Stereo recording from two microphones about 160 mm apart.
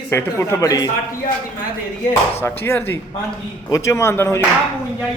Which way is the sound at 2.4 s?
15° left (ahead or behind).